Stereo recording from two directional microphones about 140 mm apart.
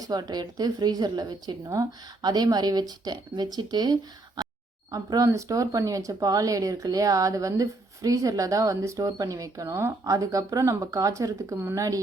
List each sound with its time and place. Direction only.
0.0 s speech: 30° right (ahead or behind)
4.4 s a sound: 30° right (ahead or behind)
4.9 s speech: 25° right (ahead or behind)